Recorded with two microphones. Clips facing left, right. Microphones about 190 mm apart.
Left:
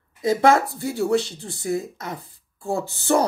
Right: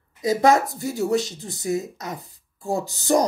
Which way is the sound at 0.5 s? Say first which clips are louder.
Even; 20° right (ahead or behind).